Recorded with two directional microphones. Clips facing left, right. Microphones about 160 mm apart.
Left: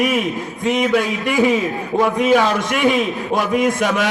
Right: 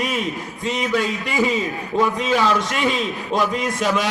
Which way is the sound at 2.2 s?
55° left (ahead or behind).